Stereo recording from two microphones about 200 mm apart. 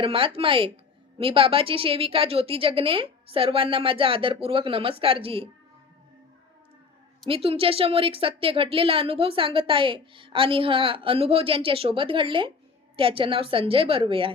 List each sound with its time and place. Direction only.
0.0 s a woman's voice: 30° right (ahead or behind)
7.3 s a woman's voice: 30° right (ahead or behind)